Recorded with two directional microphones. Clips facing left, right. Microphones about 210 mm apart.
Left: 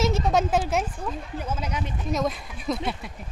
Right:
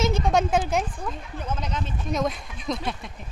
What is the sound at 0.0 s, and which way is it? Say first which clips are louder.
Speech: even; 5° left (ahead or behind).